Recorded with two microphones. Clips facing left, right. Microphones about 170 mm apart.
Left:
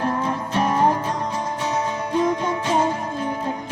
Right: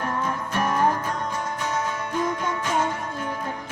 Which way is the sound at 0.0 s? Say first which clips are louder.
Left 4 dB; 30° left (ahead or behind).